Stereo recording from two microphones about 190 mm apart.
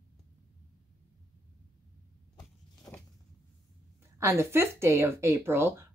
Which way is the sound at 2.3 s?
15° left (ahead or behind).